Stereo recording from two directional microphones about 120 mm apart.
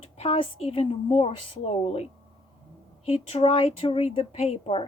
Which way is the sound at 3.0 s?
55° left (ahead or behind).